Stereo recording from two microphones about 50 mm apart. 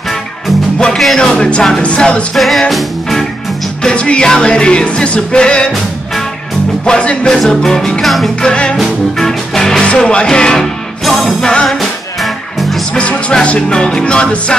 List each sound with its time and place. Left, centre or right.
0.9 s music: centre
1.3 s music: left
2.3 s music: centre
3.8 s music: left
6.9 s music: centre
8.7 s music: centre
12.9 s music: left